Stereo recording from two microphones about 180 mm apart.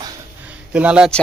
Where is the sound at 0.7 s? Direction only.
5° right (ahead or behind).